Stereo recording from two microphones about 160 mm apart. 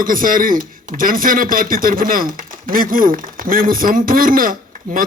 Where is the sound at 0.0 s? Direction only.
60° right (ahead or behind).